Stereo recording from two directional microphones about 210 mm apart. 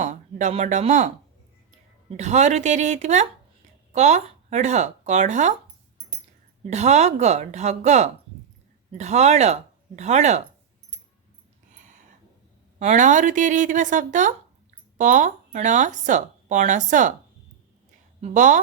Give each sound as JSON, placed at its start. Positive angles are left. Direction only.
{"t": 0.0, "sound": "speech", "side_deg": -35}
{"t": 6.7, "sound": "speech", "side_deg": -30}
{"t": 12.8, "sound": "speech", "side_deg": -35}
{"t": 18.2, "sound": "a woman's voice", "side_deg": -35}